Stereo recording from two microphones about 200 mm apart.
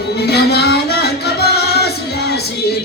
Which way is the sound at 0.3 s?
55° left (ahead or behind).